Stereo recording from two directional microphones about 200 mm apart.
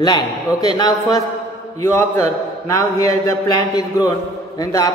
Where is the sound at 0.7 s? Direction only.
20° left (ahead or behind).